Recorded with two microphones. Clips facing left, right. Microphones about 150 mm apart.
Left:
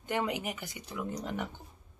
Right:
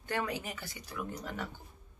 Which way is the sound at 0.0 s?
20° left (ahead or behind).